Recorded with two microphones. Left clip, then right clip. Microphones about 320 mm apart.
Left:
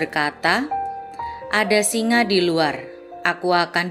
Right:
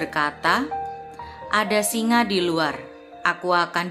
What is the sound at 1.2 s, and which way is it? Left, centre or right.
A woman's voice, centre.